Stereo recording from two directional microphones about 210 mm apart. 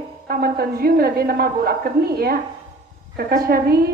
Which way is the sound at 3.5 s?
45° right (ahead or behind).